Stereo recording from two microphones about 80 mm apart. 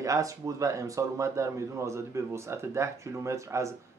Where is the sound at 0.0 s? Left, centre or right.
Right.